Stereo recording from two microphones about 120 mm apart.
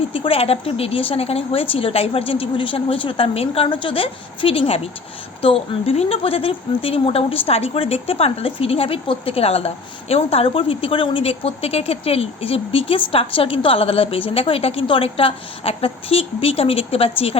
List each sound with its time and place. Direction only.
0.1 s speech: 50° left (ahead or behind)